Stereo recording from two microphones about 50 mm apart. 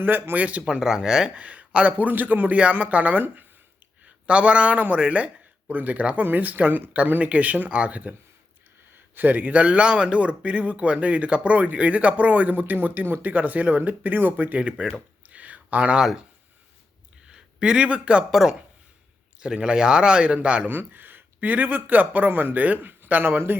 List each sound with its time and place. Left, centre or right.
0.0 s speech: right
0.6 s speech: centre
1.4 s speech: right
4.9 s a sound: right
5.7 s speech: right
9.1 s speech: right
14.8 s a sound: right
16.0 s speech: centre
17.2 s a sound: centre
17.8 s speech: right
18.3 s speech: centre
19.4 s speech: centre
20.7 s speech: right